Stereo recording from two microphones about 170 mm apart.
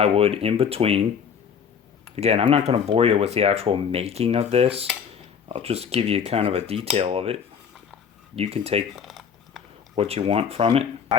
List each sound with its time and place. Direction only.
0.0 s speech: 35° right (ahead or behind)
2.1 s speech: 35° right (ahead or behind)
8.4 s speech: 35° right (ahead or behind)
9.0 s typing: centre (ahead or behind)
9.9 s speech: 35° right (ahead or behind)